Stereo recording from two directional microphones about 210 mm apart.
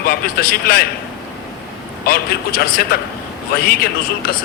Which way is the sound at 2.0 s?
45° left (ahead or behind).